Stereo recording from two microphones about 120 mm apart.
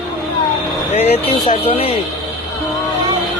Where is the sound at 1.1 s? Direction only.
50° left (ahead or behind).